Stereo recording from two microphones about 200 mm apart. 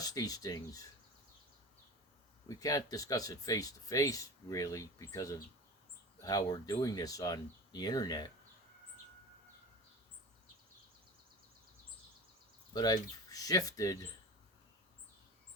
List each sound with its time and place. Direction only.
0.0 s speech: 20° left (ahead or behind)
2.5 s speech: 15° left (ahead or behind)
12.7 s speech: 20° left (ahead or behind)